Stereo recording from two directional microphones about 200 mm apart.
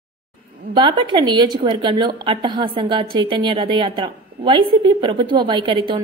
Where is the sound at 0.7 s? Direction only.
25° right (ahead or behind).